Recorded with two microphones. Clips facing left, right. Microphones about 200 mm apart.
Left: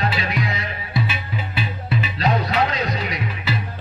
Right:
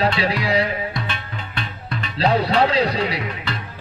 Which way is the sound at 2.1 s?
30° right (ahead or behind).